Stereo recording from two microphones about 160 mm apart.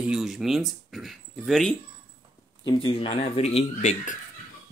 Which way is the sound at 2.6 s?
30° left (ahead or behind).